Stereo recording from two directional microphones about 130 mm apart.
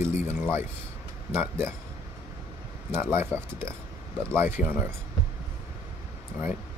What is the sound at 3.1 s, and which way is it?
Speech, 20° right (ahead or behind).